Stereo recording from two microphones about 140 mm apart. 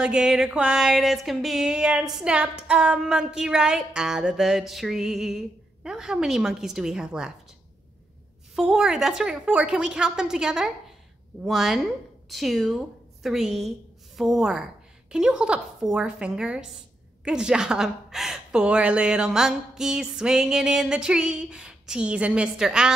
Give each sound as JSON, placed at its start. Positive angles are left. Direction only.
{"t": 0.0, "sound": "a woman's voice", "side_deg": -5}
{"t": 8.5, "sound": "a woman's voice", "side_deg": -5}